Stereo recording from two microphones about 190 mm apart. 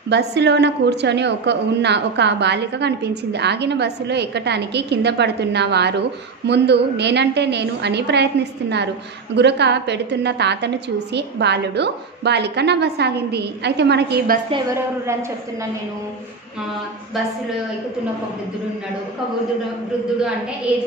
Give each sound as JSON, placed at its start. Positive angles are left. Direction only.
{"t": 0.1, "sound": "a woman's voice", "side_deg": -60}